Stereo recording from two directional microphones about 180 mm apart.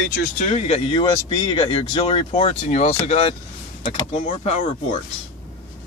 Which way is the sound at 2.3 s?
35° left (ahead or behind).